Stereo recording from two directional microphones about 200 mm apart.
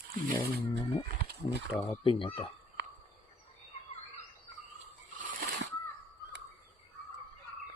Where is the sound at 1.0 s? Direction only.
50° right (ahead or behind).